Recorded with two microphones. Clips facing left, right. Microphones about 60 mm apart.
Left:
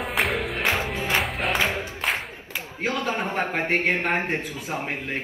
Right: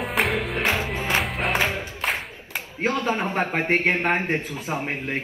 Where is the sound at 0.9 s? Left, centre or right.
Right.